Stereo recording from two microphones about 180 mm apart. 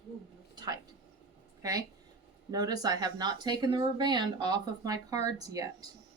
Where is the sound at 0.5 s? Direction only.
25° right (ahead or behind).